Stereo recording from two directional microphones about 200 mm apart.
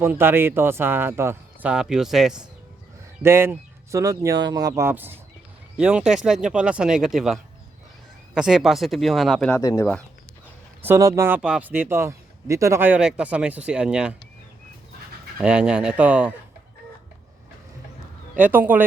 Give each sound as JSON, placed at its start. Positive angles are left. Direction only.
{"t": 0.0, "sound": "speech", "side_deg": -10}
{"t": 8.4, "sound": "speech", "side_deg": 0}
{"t": 9.6, "sound": "speech", "side_deg": 15}
{"t": 10.8, "sound": "speech", "side_deg": -15}
{"t": 15.4, "sound": "speech", "side_deg": -5}
{"t": 18.3, "sound": "speech", "side_deg": -10}